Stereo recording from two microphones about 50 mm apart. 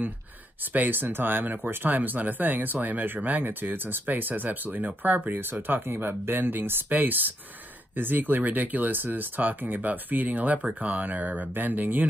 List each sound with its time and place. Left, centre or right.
0.7 s speech: right